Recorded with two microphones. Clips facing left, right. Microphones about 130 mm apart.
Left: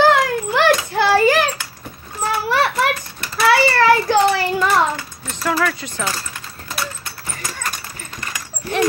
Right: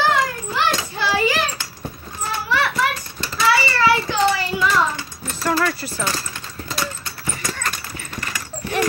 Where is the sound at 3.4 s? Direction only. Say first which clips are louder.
Left 4 dB; 60° left (ahead or behind).